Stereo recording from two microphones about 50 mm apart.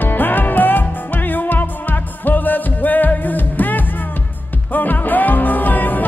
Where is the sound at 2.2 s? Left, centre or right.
Left.